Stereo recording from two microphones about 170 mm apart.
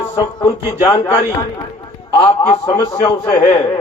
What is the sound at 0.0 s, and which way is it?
Speech, 20° left (ahead or behind).